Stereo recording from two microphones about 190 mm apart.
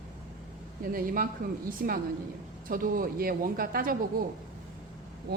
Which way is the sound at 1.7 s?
50° right (ahead or behind).